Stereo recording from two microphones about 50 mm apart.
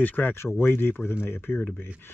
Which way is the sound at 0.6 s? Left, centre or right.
Left.